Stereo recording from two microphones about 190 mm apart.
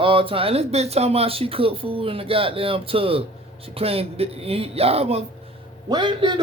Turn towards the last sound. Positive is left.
turn(degrees=-25)  # may be behind; listen again after turning